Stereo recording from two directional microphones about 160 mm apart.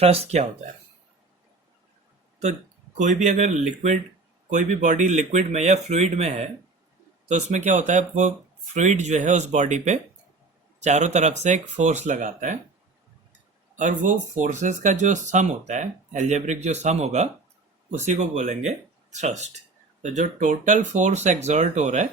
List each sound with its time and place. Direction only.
0.0 s speech: 40° right (ahead or behind)
3.0 s speech: 50° right (ahead or behind)
13.7 s speech: 50° right (ahead or behind)